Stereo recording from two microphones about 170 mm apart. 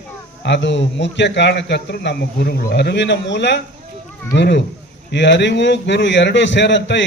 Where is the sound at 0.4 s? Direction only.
90° left.